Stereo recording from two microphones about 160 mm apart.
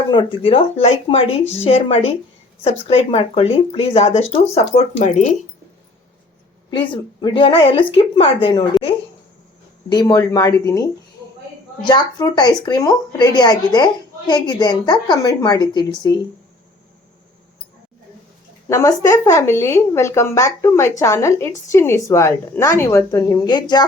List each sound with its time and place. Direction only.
0.1 s speech: 30° left (ahead or behind); by 5.2 s 45° left (ahead or behind)
6.7 s speech: 30° left (ahead or behind)
9.9 s speech: 25° left (ahead or behind)
11.9 s speech: 25° left (ahead or behind)
18.7 s speech: 20° left (ahead or behind)